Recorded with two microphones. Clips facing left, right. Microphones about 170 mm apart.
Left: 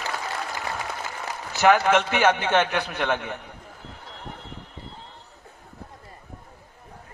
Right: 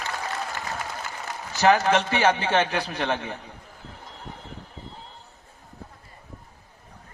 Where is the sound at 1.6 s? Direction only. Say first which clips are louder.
Left 1 dB; 35° right (ahead or behind).